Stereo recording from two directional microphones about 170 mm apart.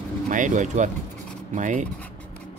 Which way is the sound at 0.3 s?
45° right (ahead or behind).